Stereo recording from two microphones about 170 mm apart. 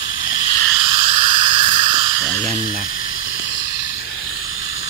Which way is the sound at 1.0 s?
35° right (ahead or behind).